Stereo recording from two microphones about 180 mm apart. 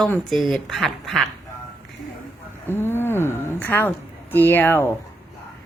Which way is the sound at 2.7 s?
10° left (ahead or behind).